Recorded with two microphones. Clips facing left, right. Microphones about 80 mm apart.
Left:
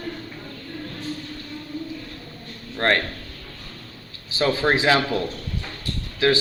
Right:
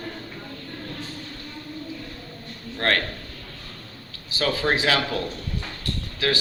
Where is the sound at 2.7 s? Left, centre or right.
Left.